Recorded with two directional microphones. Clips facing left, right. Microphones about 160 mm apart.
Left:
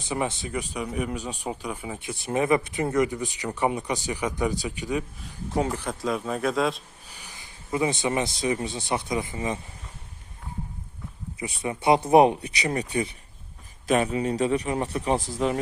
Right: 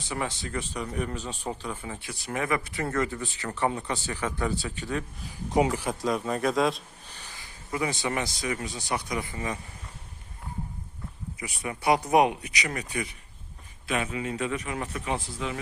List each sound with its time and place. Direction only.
0.0 s speech: 20° left (ahead or behind)
5.5 s speech: 10° right (ahead or behind)
7.1 s speech: 10° left (ahead or behind)
11.3 s speech: 25° left (ahead or behind); by 15.5 s 40° left (ahead or behind)